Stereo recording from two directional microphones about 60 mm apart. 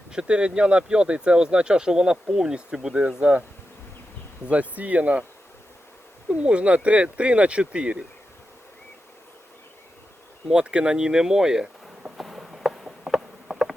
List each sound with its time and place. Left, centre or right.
0.1 s speech: centre
4.7 s speech: right
6.2 s speech: centre
10.5 s speech: centre
12.2 s insect: centre